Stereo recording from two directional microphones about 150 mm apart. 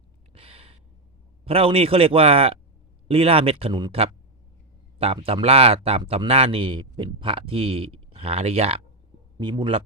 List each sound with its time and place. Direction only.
0.3 s gasp: 40° right (ahead or behind)
1.5 s a man's voice: 40° right (ahead or behind)
9.4 s a man's voice: 30° right (ahead or behind)